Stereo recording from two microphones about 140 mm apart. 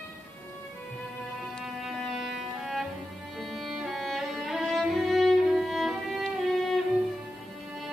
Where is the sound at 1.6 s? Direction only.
Centre (ahead or behind).